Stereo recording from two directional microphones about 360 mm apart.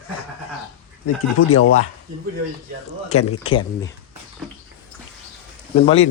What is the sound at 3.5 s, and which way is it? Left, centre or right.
Speech, centre.